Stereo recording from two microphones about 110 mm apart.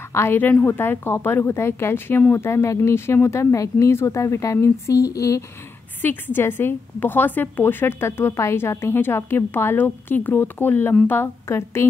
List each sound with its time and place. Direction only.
0.1 s speech: 20° left (ahead or behind)
6.0 s speech: 20° left (ahead or behind)